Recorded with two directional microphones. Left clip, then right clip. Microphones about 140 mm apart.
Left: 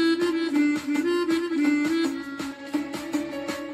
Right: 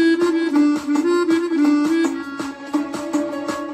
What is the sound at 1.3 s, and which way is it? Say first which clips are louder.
Music: right 6 dB; 10° left (ahead or behind).